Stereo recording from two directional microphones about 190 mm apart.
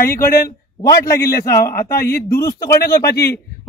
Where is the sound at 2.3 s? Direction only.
15° left (ahead or behind).